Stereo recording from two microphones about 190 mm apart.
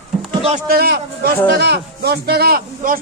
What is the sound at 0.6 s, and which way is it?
A man's voice, 55° right (ahead or behind).